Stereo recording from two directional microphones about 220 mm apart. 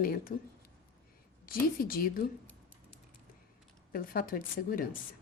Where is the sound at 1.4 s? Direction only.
40° left (ahead or behind).